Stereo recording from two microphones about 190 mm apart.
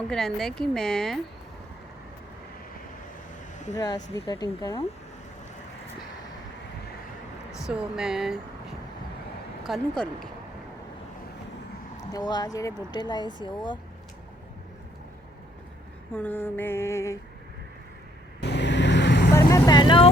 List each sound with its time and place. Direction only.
0.1 s speech: centre (ahead or behind)
3.8 s speech: 20° left (ahead or behind)
7.7 s speech: 5° right (ahead or behind)
9.6 s speech: centre (ahead or behind)
12.1 s speech: 20° left (ahead or behind)
16.1 s a sound: 10° left (ahead or behind)
18.3 s vehicle: 65° left (ahead or behind)
19.3 s vehicle: 15° left (ahead or behind)